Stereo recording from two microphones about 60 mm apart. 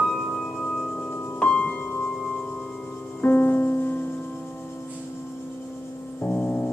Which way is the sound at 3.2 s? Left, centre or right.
Left.